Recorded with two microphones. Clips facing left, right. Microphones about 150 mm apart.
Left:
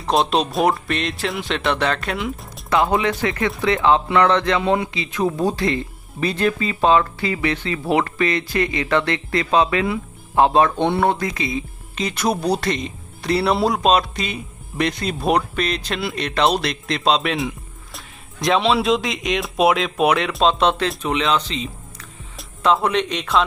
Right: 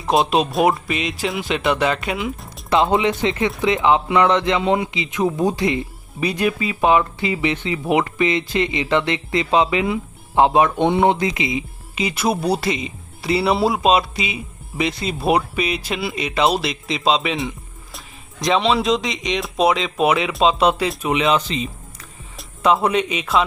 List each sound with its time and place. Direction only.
0.0 s speech: centre (ahead or behind)
2.6 s speech: 20° right (ahead or behind)
11.9 s speech: 5° right (ahead or behind)